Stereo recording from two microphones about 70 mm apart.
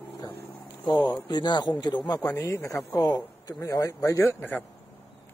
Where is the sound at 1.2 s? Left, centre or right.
Left.